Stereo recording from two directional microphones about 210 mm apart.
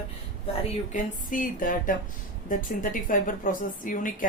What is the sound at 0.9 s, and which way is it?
A woman's voice, 40° left (ahead or behind).